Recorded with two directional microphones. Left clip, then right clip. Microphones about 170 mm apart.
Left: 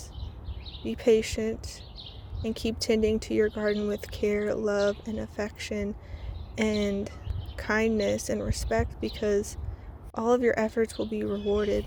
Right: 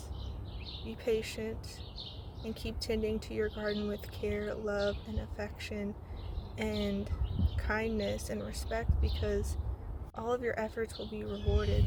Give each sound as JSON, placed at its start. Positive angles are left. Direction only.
{"t": 0.9, "sound": "speech", "side_deg": 45}